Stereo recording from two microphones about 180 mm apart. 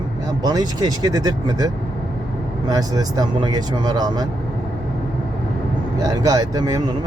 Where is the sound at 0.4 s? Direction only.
20° right (ahead or behind).